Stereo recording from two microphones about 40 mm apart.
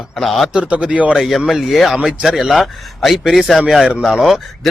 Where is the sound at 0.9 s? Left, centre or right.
Right.